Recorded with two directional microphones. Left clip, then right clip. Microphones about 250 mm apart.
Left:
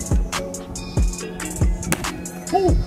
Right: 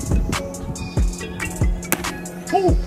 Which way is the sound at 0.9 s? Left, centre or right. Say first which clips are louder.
Even; centre.